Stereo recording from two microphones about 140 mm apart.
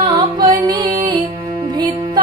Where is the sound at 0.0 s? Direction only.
30° right (ahead or behind).